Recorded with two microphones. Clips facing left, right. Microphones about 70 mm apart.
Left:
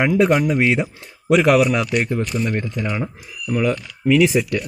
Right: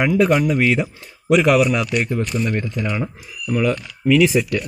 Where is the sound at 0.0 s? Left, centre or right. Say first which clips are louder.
Even; left.